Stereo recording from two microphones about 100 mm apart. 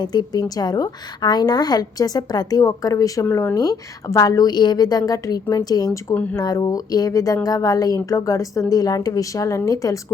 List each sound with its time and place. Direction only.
0.0 s a woman's voice: 45° left (ahead or behind)
3.2 s speech: 25° left (ahead or behind)
3.5 s a woman's voice: 40° left (ahead or behind)